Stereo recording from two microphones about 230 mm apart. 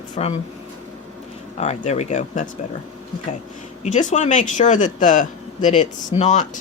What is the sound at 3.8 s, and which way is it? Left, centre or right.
Speech, left.